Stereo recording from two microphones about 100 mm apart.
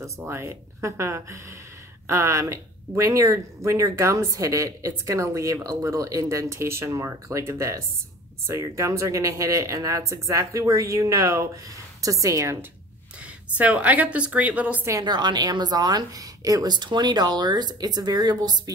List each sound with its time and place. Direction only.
0.2 s speech: 25° right (ahead or behind)
13.6 s a woman's voice: 15° right (ahead or behind)
14.9 s a woman's voice: 40° right (ahead or behind)